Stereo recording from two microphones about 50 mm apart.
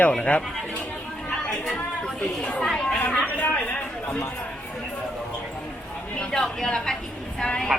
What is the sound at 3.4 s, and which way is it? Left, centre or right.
Speech, left.